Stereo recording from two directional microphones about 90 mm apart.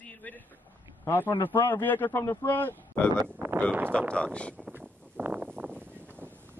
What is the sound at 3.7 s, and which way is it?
Speech, 20° right (ahead or behind).